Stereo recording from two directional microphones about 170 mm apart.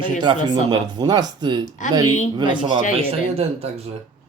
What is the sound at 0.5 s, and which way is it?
Speech, 25° right (ahead or behind).